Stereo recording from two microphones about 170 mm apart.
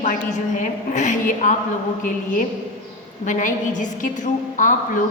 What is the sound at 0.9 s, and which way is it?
Speech, 45° left (ahead or behind).